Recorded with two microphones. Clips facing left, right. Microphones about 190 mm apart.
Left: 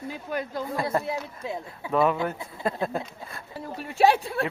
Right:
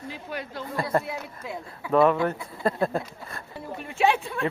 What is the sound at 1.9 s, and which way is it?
Speech, centre (ahead or behind).